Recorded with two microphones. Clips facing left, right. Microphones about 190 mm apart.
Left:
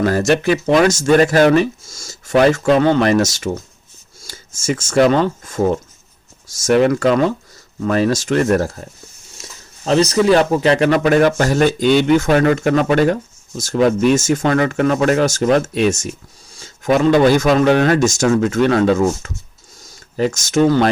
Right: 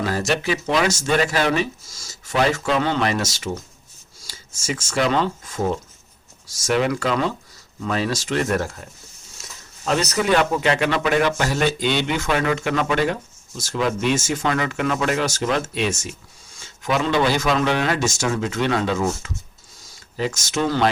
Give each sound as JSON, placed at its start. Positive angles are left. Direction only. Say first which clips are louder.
{"t": 0.0, "sound": "speech", "louder": "left 7 dB", "side_deg": 50}